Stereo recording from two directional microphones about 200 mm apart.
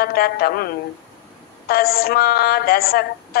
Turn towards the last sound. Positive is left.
turn(degrees=50)  # may be behind; listen again after turning